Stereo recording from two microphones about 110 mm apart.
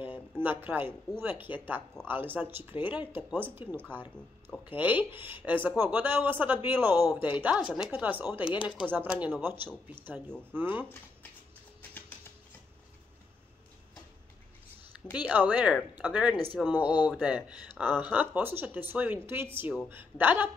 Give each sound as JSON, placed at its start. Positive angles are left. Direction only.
{"t": 0.4, "sound": "speech", "side_deg": -20}
{"t": 15.1, "sound": "speech", "side_deg": -15}